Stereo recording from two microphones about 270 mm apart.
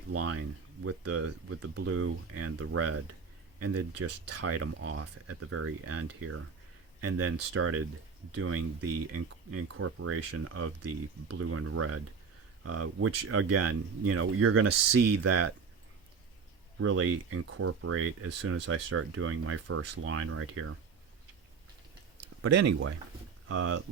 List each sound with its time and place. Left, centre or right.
0.1 s speech: right
16.8 s speech: right
22.4 s speech: right